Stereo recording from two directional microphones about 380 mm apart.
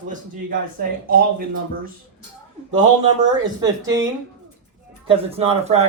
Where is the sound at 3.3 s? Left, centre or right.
Centre.